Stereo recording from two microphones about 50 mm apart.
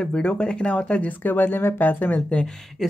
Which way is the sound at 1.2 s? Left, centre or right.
Left.